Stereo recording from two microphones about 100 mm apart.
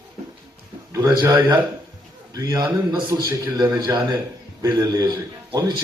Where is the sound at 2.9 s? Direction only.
50° right (ahead or behind).